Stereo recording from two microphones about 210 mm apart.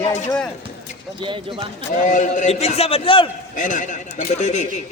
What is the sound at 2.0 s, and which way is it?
A man's voice, 40° left (ahead or behind).